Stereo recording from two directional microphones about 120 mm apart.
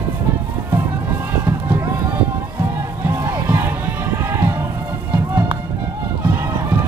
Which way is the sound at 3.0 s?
20° right (ahead or behind).